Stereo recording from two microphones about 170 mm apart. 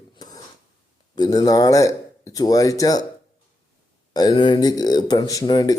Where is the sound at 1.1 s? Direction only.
25° left (ahead or behind).